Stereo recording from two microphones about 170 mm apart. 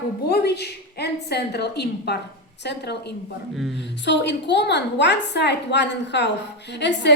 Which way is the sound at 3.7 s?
90° left.